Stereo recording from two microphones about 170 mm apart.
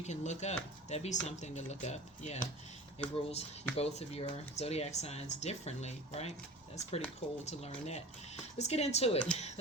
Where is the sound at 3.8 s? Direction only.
40° left (ahead or behind).